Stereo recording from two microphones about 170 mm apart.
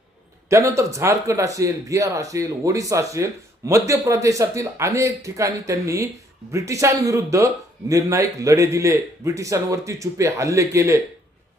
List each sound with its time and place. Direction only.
0.5 s speech: 20° right (ahead or behind)